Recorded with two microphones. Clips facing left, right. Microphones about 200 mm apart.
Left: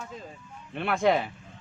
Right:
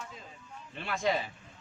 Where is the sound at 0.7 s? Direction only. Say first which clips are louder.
Left 7 dB; 60° left (ahead or behind).